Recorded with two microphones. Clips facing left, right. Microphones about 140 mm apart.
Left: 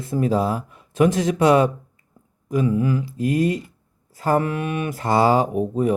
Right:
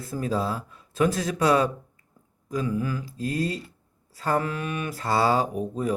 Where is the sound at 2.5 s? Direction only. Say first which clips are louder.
Left 7 dB; 15° left (ahead or behind).